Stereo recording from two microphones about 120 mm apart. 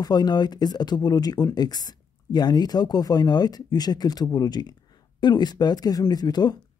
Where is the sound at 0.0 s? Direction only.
35° left (ahead or behind).